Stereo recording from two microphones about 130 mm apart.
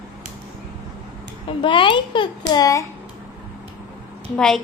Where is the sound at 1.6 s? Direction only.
40° left (ahead or behind).